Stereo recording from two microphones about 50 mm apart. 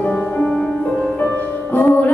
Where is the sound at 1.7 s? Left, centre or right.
Left.